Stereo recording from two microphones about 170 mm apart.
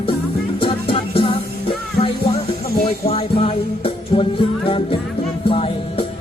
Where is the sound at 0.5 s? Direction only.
30° left (ahead or behind).